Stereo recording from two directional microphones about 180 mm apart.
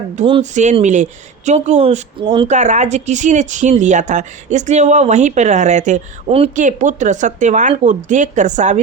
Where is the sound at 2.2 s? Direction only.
25° right (ahead or behind).